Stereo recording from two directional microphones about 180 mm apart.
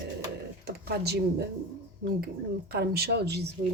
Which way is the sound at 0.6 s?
65° right (ahead or behind).